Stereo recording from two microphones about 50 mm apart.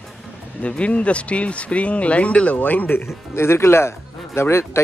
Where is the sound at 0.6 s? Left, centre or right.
Left.